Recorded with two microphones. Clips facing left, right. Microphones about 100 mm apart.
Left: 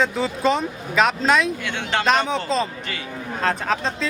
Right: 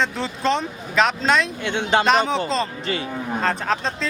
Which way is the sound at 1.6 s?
20° right (ahead or behind).